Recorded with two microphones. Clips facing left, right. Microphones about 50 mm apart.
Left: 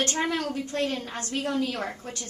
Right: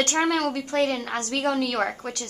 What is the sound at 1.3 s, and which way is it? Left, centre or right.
Speech, right.